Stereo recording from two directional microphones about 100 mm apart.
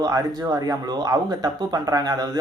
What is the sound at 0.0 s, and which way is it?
Speech, 40° right (ahead or behind).